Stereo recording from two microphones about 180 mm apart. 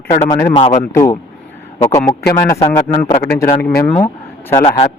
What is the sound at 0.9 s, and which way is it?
Speech, 15° left (ahead or behind).